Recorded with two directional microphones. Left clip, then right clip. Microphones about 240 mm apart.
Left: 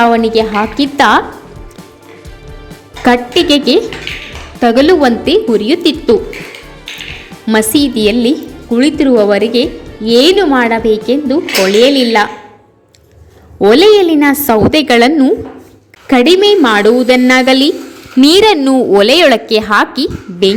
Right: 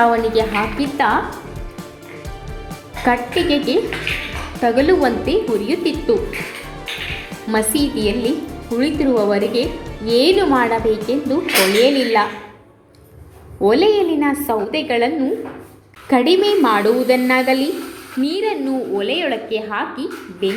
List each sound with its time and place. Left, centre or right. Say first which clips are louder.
0.0 s a woman's voice: left 6 dB; left
3.0 s a woman's voice: left 7 dB; left
7.4 s a woman's voice: left 8 dB; left
13.6 s a woman's voice: left 8 dB; left
18.2 s a woman's voice: left 14 dB; left